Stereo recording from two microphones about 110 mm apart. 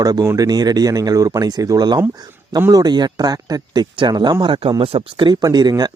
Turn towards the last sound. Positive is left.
turn(degrees=-40)  # may be behind; listen again after turning